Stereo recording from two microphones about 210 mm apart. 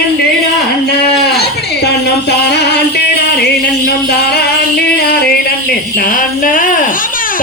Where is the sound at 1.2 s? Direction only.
50° left (ahead or behind).